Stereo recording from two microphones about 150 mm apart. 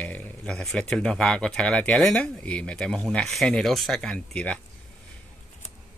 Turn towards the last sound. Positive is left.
turn(degrees=10)  # may be behind; listen again after turning